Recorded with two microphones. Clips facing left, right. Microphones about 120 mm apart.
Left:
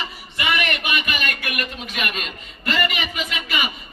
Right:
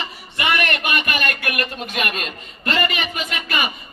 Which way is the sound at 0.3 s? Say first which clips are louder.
Right 2 dB; 50° right (ahead or behind).